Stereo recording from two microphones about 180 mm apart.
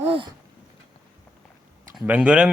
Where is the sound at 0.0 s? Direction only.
30° right (ahead or behind).